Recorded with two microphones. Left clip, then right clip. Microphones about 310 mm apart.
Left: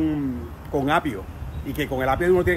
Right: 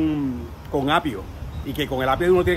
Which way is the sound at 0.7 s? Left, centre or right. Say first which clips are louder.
Right 1 dB; centre.